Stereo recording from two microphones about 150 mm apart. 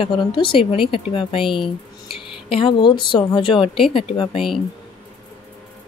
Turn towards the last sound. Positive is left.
turn(degrees=40)  # may be behind; listen again after turning